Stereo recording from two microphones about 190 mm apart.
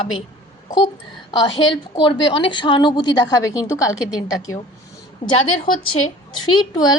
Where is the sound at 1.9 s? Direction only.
25° left (ahead or behind).